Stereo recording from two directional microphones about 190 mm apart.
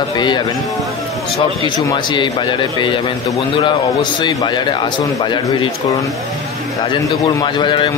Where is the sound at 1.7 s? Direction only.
25° left (ahead or behind).